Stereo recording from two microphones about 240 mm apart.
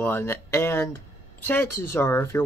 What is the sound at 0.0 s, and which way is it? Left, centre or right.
Speech, centre.